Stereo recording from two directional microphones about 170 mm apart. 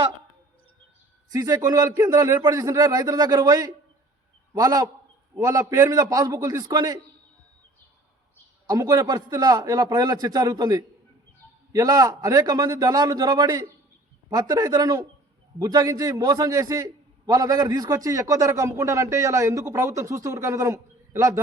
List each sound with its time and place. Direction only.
1.3 s a man's voice: 20° right (ahead or behind)
8.6 s a man's voice: 20° right (ahead or behind)